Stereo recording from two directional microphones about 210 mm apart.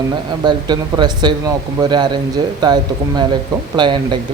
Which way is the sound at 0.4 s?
20° right (ahead or behind).